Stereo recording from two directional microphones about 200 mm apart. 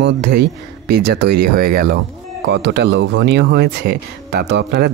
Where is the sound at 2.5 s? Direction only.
60° right (ahead or behind).